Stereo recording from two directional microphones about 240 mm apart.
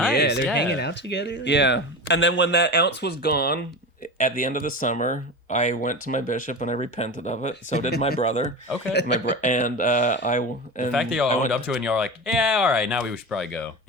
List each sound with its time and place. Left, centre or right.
0.2 s speech: left
8.9 s speech: left
9.4 s speech: left
10.9 s speech: centre